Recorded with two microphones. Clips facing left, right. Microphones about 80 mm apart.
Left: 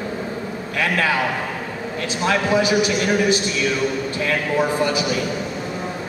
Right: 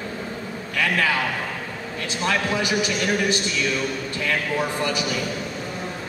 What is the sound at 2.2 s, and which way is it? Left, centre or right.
Speech, centre.